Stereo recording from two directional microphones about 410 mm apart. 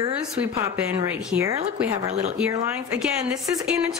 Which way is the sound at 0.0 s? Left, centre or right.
Centre.